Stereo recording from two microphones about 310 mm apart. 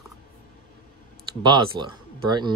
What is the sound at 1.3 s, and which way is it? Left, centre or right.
Speech, centre.